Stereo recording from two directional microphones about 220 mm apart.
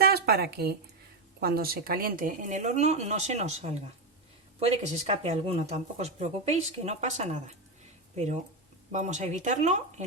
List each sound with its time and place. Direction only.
0.0 s a sound: 45° right (ahead or behind)
1.4 s speech: 45° right (ahead or behind)
4.8 s speech: 30° right (ahead or behind)